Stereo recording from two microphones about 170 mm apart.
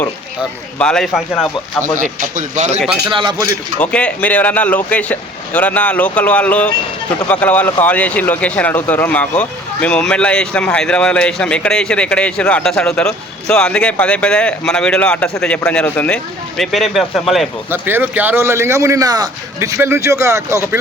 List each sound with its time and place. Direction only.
0.8 s speech: 5° left (ahead or behind)
2.0 s a man's voice: 45° right (ahead or behind)
3.1 s speech: 25° right (ahead or behind)
3.8 s speech: 5° left (ahead or behind)
17.7 s speech: 10° right (ahead or behind)